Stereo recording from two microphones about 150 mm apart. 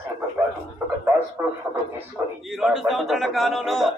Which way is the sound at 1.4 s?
15° right (ahead or behind).